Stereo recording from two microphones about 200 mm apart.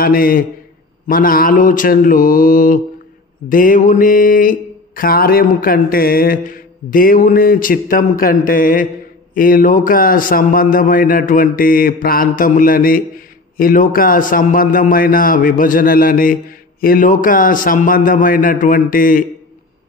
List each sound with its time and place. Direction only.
0.0 s a man's voice: 45° left (ahead or behind)